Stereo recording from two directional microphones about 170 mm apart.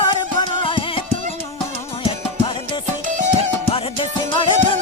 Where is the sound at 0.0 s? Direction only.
30° left (ahead or behind).